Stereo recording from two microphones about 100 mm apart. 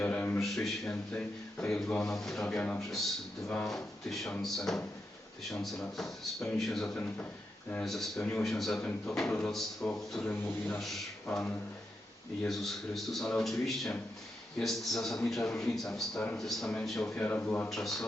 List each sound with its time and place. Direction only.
0.0 s a sound: 15° left (ahead or behind)
0.4 s a man's voice: 5° left (ahead or behind)
10.2 s a man's voice: 15° left (ahead or behind)
12.5 s a man's voice: centre (ahead or behind)
17.7 s speech: 5° left (ahead or behind)